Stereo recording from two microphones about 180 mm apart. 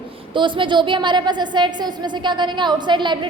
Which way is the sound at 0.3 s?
25° right (ahead or behind).